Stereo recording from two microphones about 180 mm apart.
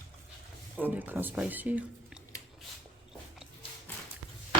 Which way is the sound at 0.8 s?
10° right (ahead or behind).